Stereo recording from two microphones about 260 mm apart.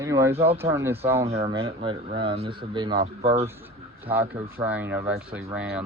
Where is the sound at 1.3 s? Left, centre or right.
Right.